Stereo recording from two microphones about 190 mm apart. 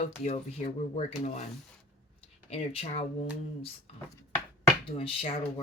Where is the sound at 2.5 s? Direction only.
30° left (ahead or behind).